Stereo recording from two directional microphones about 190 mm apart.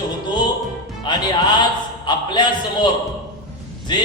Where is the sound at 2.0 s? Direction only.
25° left (ahead or behind).